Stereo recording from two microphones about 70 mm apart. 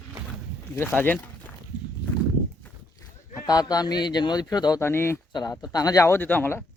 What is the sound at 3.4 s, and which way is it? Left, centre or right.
Speech, left.